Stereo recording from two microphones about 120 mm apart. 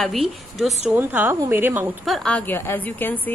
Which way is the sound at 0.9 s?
15° right (ahead or behind).